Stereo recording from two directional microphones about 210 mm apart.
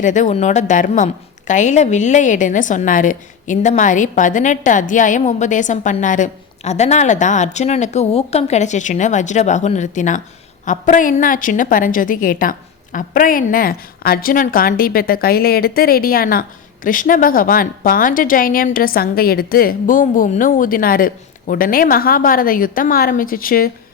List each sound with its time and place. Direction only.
0.0 s a woman's voice: 35° left (ahead or behind)